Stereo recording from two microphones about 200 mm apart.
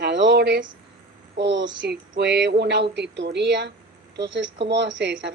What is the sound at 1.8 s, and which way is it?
A woman's voice, 50° right (ahead or behind).